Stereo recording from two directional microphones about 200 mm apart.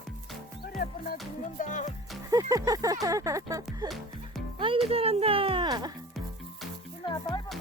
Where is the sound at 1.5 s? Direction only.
40° left (ahead or behind).